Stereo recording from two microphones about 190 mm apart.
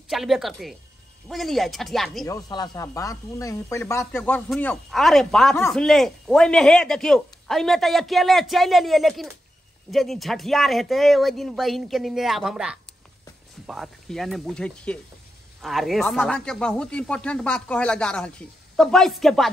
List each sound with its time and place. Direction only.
0.1 s speech: centre (ahead or behind)
2.2 s speech: 20° left (ahead or behind); by 19.5 s centre (ahead or behind)